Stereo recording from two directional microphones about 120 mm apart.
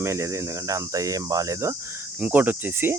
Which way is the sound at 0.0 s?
25° right (ahead or behind).